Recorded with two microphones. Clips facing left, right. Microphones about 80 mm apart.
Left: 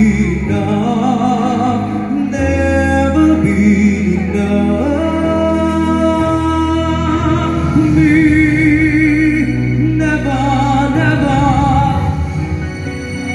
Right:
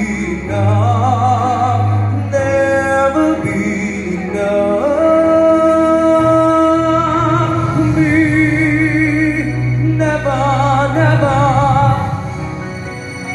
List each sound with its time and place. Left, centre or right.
2.3 s music: right
4.6 s music: right
7.9 s music: right
9.9 s music: right